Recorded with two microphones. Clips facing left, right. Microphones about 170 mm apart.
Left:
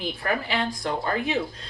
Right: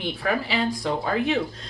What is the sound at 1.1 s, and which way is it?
Speech, centre (ahead or behind).